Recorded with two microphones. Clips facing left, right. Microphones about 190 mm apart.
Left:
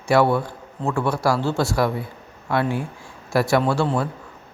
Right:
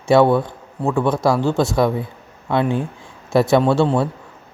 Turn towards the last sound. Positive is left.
turn(degrees=-25)  # may be behind; listen again after turning